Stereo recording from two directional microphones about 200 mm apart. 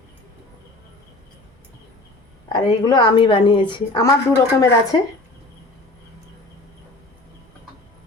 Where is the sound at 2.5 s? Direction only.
20° left (ahead or behind).